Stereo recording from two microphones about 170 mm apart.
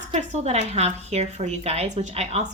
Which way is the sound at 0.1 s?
40° right (ahead or behind).